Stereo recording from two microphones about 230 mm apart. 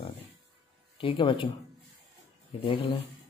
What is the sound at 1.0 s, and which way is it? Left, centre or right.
Speech, left.